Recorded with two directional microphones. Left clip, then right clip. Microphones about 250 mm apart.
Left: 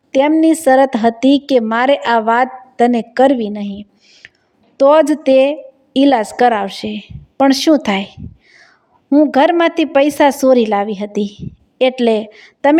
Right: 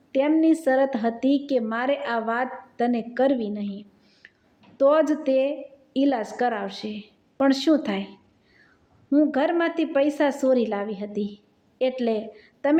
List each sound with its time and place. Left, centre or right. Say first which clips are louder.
0.1 s a woman's voice: left 9 dB; left